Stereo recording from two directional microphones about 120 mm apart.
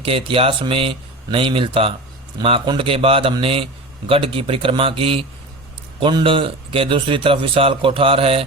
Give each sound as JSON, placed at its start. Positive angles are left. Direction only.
{"t": 0.0, "sound": "a man's voice", "side_deg": -50}